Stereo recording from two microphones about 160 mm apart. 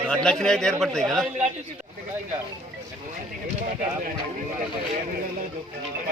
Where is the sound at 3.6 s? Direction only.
55° right (ahead or behind).